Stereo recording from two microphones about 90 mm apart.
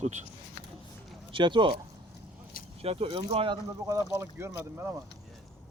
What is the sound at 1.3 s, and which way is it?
Speech, 65° right (ahead or behind).